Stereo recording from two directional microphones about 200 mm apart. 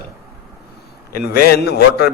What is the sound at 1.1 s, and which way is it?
A man's voice, 50° left (ahead or behind).